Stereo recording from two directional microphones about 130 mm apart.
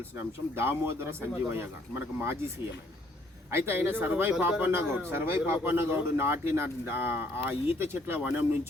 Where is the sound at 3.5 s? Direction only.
15° right (ahead or behind).